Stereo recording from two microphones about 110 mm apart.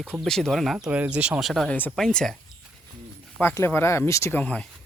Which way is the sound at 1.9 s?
5° left (ahead or behind).